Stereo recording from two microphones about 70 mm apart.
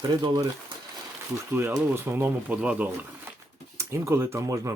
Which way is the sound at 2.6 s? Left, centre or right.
Right.